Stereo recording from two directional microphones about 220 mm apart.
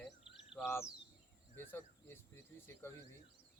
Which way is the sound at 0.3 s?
Centre (ahead or behind).